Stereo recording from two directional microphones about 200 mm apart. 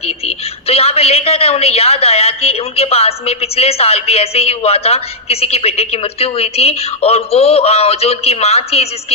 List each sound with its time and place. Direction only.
0.3 s a woman's voice: 30° left (ahead or behind)